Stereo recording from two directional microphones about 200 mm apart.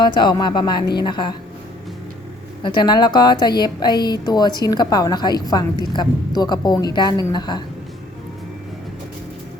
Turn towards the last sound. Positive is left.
turn(degrees=20)  # may be behind; listen again after turning